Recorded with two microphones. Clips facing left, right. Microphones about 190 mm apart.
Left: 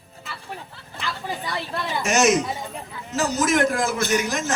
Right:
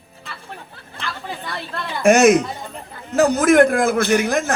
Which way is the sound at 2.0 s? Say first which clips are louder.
Right 8 dB; 55° right (ahead or behind).